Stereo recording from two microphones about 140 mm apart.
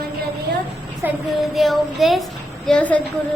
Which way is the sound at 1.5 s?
Centre (ahead or behind).